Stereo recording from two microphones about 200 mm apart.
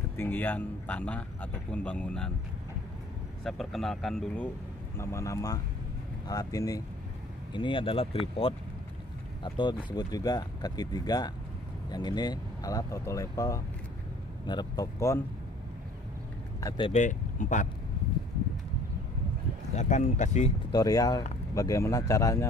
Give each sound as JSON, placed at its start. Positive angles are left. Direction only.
{"t": 0.2, "sound": "speech", "side_deg": 10}
{"t": 3.4, "sound": "speech", "side_deg": 0}
{"t": 4.9, "sound": "speech", "side_deg": 15}
{"t": 16.6, "sound": "speech", "side_deg": 25}
{"t": 16.9, "sound": "speech", "side_deg": 40}
{"t": 19.7, "sound": "speech", "side_deg": 35}
{"t": 20.7, "sound": "speech", "side_deg": 20}